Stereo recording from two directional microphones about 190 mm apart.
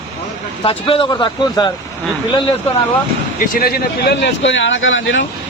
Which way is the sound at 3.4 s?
50° left (ahead or behind).